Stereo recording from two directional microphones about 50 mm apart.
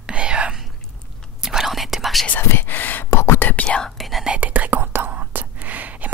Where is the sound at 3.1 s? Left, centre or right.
Left.